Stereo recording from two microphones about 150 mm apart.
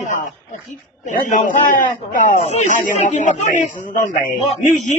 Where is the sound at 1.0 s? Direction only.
60° left (ahead or behind).